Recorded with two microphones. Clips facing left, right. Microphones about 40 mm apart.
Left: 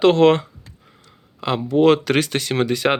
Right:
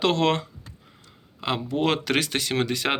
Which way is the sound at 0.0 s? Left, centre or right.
Left.